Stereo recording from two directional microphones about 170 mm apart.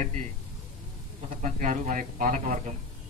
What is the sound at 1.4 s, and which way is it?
Speech, 50° right (ahead or behind).